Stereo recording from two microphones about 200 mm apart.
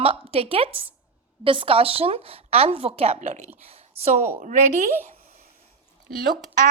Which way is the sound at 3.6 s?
30° right (ahead or behind).